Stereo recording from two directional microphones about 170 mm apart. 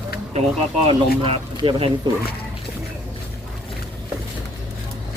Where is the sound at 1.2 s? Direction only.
30° right (ahead or behind).